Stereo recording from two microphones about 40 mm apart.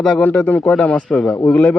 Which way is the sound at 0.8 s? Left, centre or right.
Left.